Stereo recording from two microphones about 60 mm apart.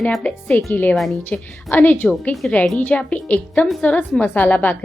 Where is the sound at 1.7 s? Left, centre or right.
Left.